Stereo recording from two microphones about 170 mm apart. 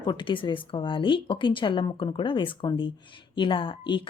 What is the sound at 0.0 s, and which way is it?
Speech, 25° left (ahead or behind).